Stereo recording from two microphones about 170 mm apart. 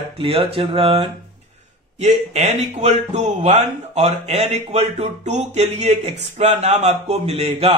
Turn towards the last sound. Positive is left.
turn(degrees=-35)  # may be behind; listen again after turning